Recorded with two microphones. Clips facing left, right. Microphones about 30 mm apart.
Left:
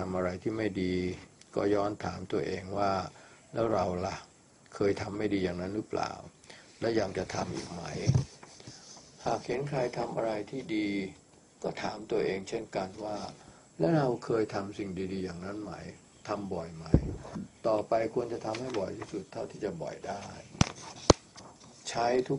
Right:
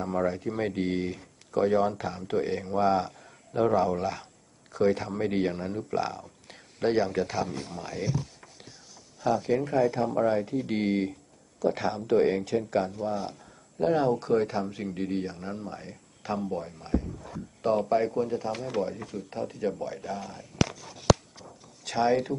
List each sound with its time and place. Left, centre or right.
0.0 s speech: centre
14.4 s speech: right
17.3 s speech: right
18.5 s speech: centre
19.3 s speech: centre
20.2 s a sound: centre
21.8 s speech: right